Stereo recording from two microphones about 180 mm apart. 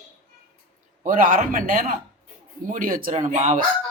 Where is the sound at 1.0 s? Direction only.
50° right (ahead or behind).